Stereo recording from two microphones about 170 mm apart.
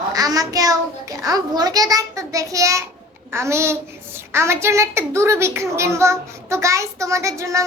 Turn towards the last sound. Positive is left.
turn(degrees=-20)  # may be behind; listen again after turning